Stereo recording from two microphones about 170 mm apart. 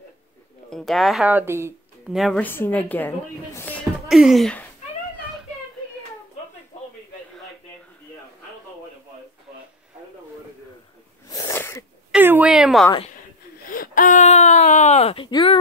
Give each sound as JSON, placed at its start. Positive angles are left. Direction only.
{"t": 0.7, "sound": "speech", "side_deg": 0}
{"t": 2.0, "sound": "a woman's voice", "side_deg": 0}
{"t": 2.4, "sound": "a woman's voice", "side_deg": 10}
{"t": 3.5, "sound": "music", "side_deg": 10}
{"t": 4.1, "sound": "speech", "side_deg": 0}
{"t": 11.2, "sound": "sneeze", "side_deg": 20}
{"t": 12.1, "sound": "a sound", "side_deg": -10}
{"t": 13.7, "sound": "a sound", "side_deg": 55}
{"t": 15.2, "sound": "speech", "side_deg": 25}